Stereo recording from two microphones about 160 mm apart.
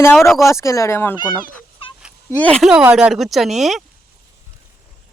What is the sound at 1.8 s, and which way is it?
Fowl, 35° left (ahead or behind).